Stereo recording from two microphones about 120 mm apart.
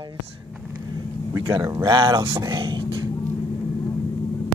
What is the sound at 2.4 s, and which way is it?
Speech, 40° right (ahead or behind).